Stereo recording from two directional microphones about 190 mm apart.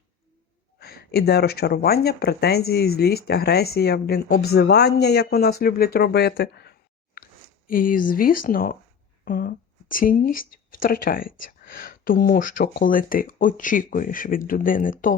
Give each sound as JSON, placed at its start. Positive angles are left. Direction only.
{"t": 0.8, "sound": "speech", "side_deg": 55}